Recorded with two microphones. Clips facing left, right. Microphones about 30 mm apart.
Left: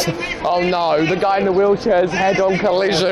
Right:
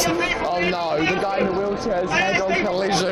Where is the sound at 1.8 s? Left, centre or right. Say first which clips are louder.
Left 7 dB; left.